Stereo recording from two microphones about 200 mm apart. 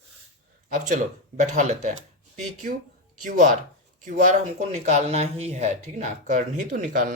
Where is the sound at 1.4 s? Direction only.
40° right (ahead or behind).